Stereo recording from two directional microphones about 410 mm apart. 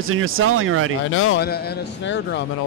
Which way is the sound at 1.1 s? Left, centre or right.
Left.